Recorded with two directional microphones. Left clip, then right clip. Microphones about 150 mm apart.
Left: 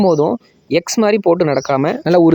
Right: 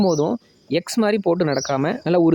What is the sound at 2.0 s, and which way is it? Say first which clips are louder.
Speech: left 6 dB; 25° left (ahead or behind).